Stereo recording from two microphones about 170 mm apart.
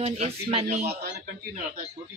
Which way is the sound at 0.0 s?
35° right (ahead or behind).